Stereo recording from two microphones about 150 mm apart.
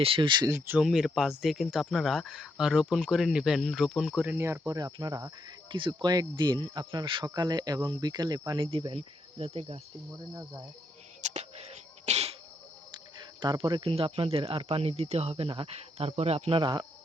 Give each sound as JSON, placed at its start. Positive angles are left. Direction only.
{"t": 0.0, "sound": "speech", "side_deg": -35}
{"t": 0.8, "sound": "speech", "side_deg": -5}
{"t": 10.1, "sound": "speech", "side_deg": -25}
{"t": 11.2, "sound": "a sound", "side_deg": -50}
{"t": 12.0, "sound": "insect", "side_deg": -45}
{"t": 13.4, "sound": "speech", "side_deg": -30}